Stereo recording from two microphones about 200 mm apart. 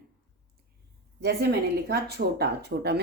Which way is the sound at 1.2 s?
55° right (ahead or behind).